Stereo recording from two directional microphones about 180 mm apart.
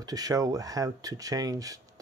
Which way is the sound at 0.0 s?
20° right (ahead or behind).